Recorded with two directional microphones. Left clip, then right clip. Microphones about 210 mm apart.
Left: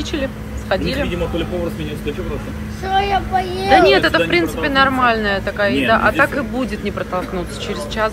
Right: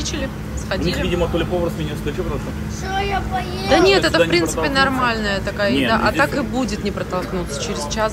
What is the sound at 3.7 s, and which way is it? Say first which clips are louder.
Speech: left 3 dB; 10° right (ahead or behind).